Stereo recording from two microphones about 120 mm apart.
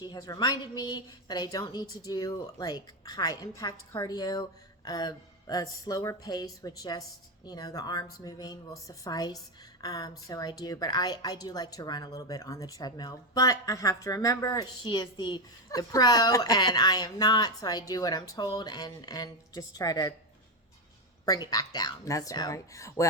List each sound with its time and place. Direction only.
0.0 s speech: 35° left (ahead or behind)
21.2 s speech: 35° left (ahead or behind)